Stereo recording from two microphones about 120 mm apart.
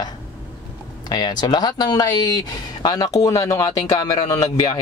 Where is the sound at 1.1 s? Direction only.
35° left (ahead or behind).